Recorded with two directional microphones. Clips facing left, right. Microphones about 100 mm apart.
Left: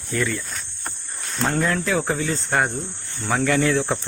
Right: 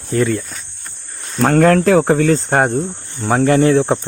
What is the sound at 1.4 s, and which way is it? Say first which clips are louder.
Cricket: right 11 dB; 60° right (ahead or behind).